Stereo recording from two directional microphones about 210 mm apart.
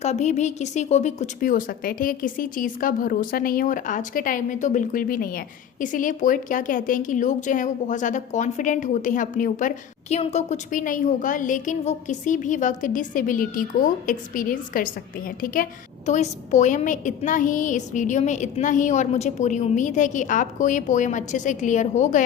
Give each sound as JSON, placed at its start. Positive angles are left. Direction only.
{"t": 0.0, "sound": "a woman's voice", "side_deg": 30}